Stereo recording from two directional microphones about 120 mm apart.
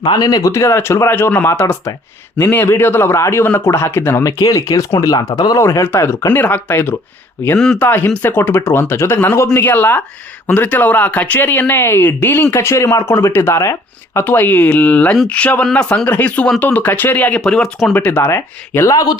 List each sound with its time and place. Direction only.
0.1 s speech: 30° left (ahead or behind)
7.4 s speech: 10° left (ahead or behind)
17.9 s speech: 15° left (ahead or behind)